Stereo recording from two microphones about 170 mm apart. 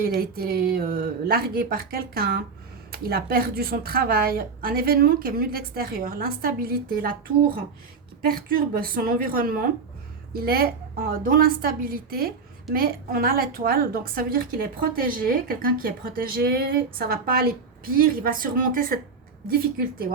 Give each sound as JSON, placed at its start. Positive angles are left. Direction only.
{"t": 0.0, "sound": "speech", "side_deg": -60}